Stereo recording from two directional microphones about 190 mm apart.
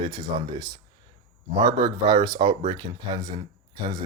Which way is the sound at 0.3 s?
30° right (ahead or behind).